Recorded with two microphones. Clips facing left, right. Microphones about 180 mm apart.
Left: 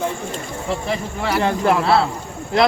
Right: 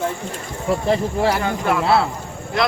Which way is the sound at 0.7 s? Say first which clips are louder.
Right 6 dB; 35° right (ahead or behind).